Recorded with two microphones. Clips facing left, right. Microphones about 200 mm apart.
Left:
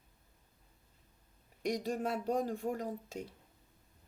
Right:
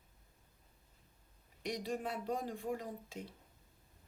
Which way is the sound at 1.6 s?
45° left (ahead or behind).